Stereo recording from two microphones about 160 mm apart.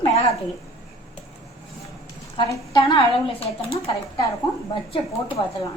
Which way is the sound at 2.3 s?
30° left (ahead or behind).